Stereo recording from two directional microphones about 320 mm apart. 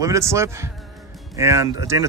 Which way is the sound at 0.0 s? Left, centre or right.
Centre.